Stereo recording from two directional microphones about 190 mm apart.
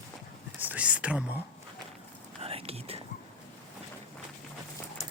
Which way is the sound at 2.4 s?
30° right (ahead or behind).